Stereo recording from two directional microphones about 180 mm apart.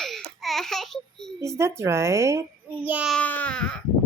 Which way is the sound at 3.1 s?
10° left (ahead or behind).